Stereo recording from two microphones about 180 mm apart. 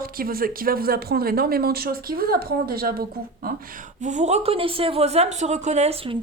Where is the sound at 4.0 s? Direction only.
40° right (ahead or behind).